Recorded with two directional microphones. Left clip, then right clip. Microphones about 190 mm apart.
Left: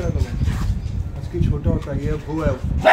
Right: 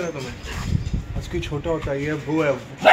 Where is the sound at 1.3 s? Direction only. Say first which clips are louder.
Left 1 dB; 30° right (ahead or behind).